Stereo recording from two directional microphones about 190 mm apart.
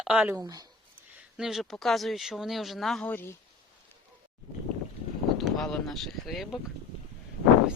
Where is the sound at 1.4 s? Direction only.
Centre (ahead or behind).